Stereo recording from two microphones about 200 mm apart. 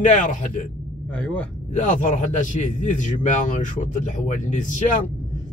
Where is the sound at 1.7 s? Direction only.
40° left (ahead or behind).